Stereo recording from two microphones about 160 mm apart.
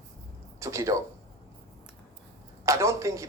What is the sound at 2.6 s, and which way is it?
Speech, 20° right (ahead or behind).